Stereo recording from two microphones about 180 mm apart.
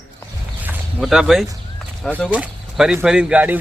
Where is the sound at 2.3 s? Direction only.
5° right (ahead or behind).